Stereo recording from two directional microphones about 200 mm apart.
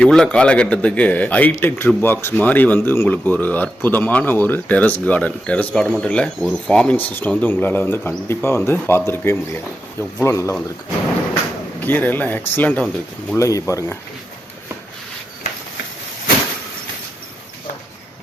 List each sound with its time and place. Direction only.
0.0 s speech: 5° left (ahead or behind)
11.8 s speech: 10° left (ahead or behind)